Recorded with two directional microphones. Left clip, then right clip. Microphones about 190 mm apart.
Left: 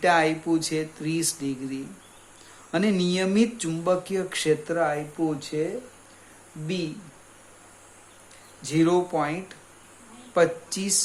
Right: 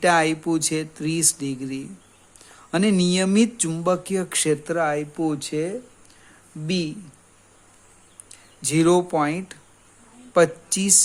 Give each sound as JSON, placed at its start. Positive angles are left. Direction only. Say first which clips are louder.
{"t": 0.0, "sound": "speech", "louder": "right 2 dB", "side_deg": -50}
{"t": 8.6, "sound": "speech", "louder": "right 3 dB", "side_deg": -55}